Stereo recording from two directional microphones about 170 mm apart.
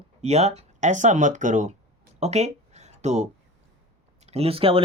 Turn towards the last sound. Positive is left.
turn(degrees=-35)  # may be behind; listen again after turning